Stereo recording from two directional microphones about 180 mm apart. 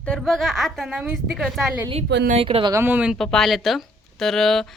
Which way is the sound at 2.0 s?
65° right (ahead or behind).